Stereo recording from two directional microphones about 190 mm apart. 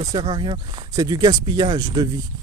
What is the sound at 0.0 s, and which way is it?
Speech, 25° right (ahead or behind).